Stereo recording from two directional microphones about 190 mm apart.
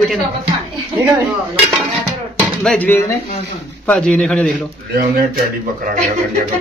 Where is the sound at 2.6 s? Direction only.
5° left (ahead or behind).